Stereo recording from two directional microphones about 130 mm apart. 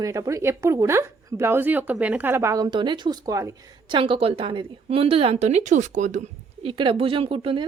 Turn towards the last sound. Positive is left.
turn(degrees=-45)  # may be behind; listen again after turning